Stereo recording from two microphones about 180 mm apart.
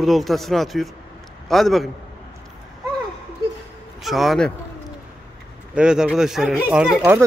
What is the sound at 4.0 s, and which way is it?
Speech, centre (ahead or behind).